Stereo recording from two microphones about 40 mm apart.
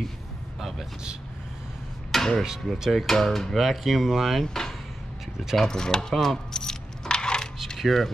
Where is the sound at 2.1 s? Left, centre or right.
Centre.